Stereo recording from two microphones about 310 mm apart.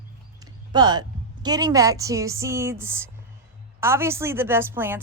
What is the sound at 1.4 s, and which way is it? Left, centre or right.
A woman's voice, centre.